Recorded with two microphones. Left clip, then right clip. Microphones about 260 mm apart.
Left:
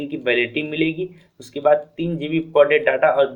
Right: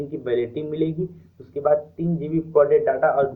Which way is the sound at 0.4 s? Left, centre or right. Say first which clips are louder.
Left 4 dB; left.